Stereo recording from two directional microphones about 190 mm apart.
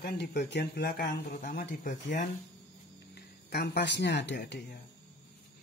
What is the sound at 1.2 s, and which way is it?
Speech, 45° left (ahead or behind).